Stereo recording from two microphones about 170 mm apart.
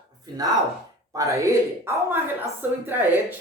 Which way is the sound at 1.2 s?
20° right (ahead or behind).